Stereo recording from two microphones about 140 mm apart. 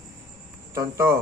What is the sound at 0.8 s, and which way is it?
Speech, 20° right (ahead or behind).